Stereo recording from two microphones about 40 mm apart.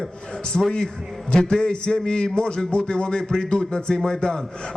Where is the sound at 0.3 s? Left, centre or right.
Centre.